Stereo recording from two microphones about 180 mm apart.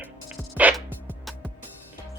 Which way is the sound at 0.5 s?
10° right (ahead or behind).